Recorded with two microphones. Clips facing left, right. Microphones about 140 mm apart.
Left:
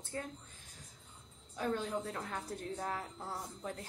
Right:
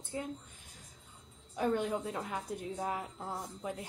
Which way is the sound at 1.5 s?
15° right (ahead or behind).